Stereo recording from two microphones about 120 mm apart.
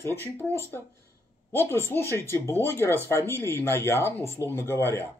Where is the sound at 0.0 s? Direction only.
20° left (ahead or behind).